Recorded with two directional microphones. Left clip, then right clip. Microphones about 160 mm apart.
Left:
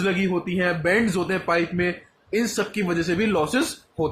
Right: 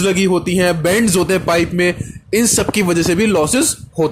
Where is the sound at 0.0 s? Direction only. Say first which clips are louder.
Right 9 dB; 70° right (ahead or behind).